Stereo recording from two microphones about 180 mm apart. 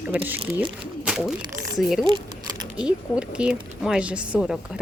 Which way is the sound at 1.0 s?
Centre (ahead or behind).